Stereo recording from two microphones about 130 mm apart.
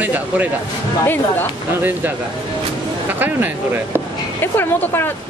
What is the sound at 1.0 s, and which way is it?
Speech, 15° left (ahead or behind).